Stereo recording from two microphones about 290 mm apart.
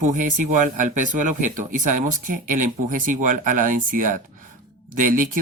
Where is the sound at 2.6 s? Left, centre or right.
Right.